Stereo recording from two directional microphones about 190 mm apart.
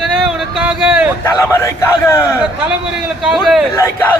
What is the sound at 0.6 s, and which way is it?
Speech, 5° right (ahead or behind).